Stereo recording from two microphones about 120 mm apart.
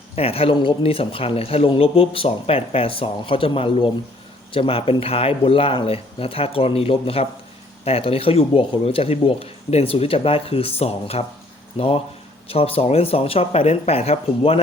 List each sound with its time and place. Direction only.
0.2 s speech: 55° left (ahead or behind)